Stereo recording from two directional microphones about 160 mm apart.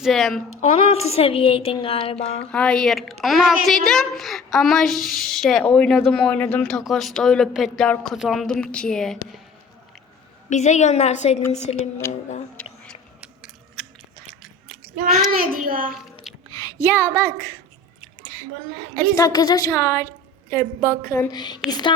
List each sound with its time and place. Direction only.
0.0 s a woman's voice: centre (ahead or behind)
0.6 s speech: 40° left (ahead or behind)
2.5 s a woman's voice: 5° left (ahead or behind)
10.5 s a woman's voice: 45° left (ahead or behind)
13.2 s a sound: 5° right (ahead or behind)
15.4 s a child's voice: 60° right (ahead or behind)
16.3 s a sound: centre (ahead or behind)
16.8 s a woman's voice: 15° left (ahead or behind)
19.1 s a woman's voice: 25° left (ahead or behind)